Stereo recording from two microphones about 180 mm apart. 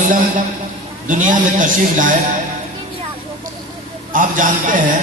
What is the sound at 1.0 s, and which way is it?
Speech, 45° right (ahead or behind).